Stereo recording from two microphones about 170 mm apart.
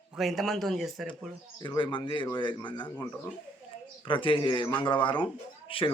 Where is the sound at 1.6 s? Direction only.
25° left (ahead or behind).